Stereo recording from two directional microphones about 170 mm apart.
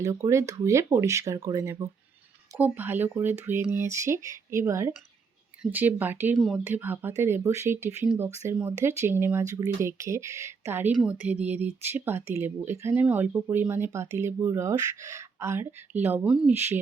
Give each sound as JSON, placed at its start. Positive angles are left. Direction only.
{"t": 0.0, "sound": "speech", "side_deg": -20}